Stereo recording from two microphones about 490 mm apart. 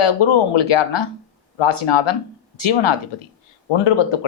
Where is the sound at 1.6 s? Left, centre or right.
Left.